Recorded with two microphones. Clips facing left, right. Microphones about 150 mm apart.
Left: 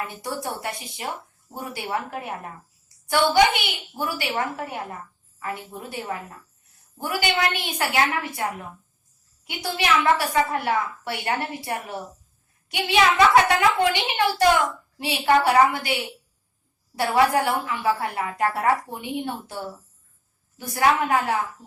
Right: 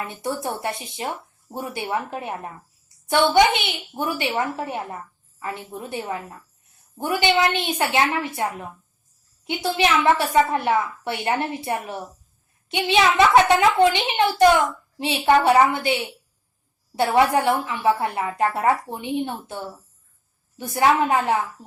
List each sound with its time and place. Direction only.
0.1 s speech: 25° right (ahead or behind)
7.0 s speech: 25° right (ahead or behind)
20.6 s speech: 20° right (ahead or behind)